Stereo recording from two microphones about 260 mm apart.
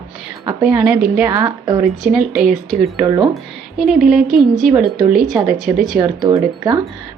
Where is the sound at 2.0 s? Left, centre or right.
Centre.